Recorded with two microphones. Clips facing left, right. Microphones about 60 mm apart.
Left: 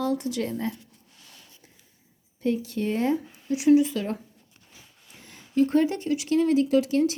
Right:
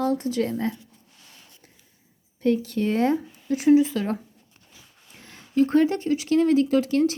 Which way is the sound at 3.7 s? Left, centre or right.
Right.